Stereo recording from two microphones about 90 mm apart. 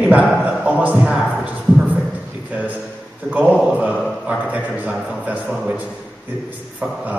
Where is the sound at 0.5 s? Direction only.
20° right (ahead or behind).